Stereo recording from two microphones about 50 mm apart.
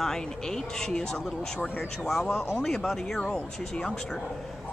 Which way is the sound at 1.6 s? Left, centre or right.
Left.